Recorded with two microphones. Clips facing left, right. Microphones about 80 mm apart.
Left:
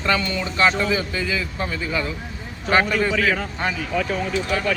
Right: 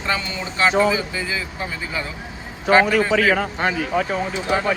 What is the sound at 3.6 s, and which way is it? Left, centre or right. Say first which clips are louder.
Speech: right 3 dB; right.